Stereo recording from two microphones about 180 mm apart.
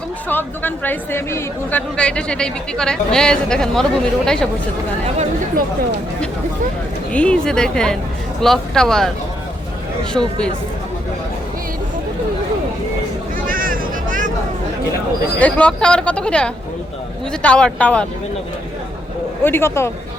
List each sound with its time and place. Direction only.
0.3 s speech: 10° left (ahead or behind)
7.1 s speech: 5° left (ahead or behind)
13.5 s vehicle: 50° right (ahead or behind)
15.4 s speech: 10° left (ahead or behind)
19.4 s speech: 10° left (ahead or behind)